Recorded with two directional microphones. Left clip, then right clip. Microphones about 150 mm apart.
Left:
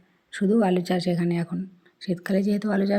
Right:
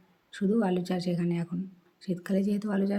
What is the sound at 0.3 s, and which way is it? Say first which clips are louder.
Speech: left 6 dB; 25° left (ahead or behind).